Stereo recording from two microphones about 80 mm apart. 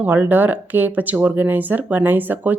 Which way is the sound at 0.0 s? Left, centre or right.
Right.